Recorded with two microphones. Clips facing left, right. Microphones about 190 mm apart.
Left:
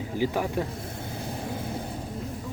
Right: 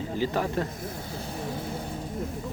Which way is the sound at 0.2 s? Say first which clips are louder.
Left 1 dB; 10° left (ahead or behind).